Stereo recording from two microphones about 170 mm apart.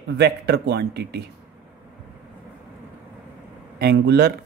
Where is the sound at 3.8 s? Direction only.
75° right (ahead or behind).